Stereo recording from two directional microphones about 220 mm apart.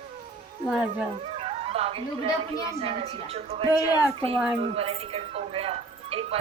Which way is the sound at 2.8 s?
25° right (ahead or behind).